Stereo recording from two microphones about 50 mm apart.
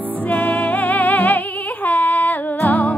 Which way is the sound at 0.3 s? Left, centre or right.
Left.